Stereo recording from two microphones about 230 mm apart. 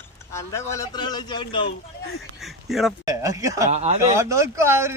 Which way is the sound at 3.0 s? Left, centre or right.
Centre.